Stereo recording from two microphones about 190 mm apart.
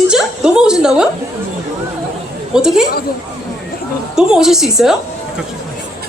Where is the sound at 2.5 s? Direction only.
5° right (ahead or behind).